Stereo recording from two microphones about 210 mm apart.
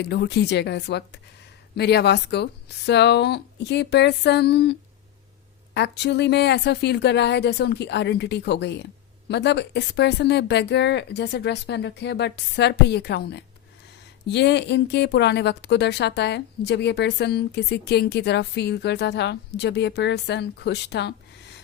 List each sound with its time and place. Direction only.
0.0 s a woman's voice: 55° left (ahead or behind)